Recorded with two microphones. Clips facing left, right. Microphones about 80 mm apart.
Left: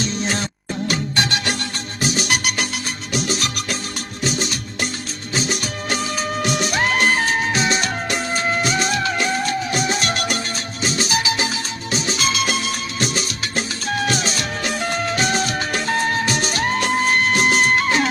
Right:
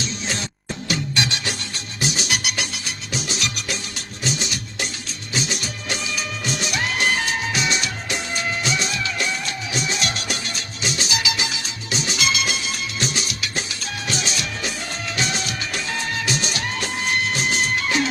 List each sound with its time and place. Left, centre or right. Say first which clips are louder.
0.0 s music: left 5 dB; left